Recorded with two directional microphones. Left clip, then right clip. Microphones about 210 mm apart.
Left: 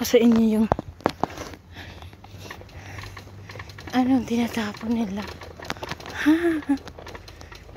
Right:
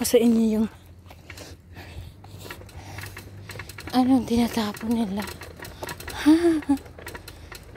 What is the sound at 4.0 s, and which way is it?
Speech, 15° right (ahead or behind).